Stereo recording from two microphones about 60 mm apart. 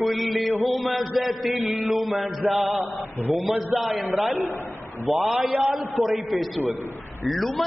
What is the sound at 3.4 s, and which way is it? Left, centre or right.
A man's voice, centre.